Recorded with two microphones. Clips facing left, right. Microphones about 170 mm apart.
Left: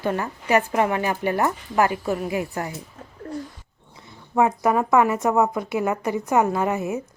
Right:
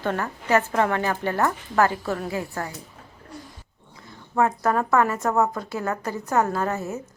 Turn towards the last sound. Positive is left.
turn(degrees=15)  # may be behind; listen again after turning